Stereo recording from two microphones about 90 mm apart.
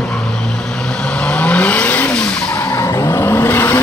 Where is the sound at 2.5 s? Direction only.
30° left (ahead or behind).